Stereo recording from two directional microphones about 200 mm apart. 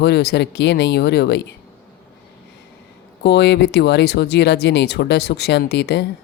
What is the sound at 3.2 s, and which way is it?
Speech, 60° left (ahead or behind).